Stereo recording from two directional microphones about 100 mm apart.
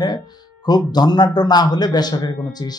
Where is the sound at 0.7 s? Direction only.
45° left (ahead or behind).